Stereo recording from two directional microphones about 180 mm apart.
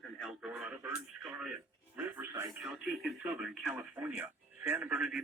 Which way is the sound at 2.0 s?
15° right (ahead or behind).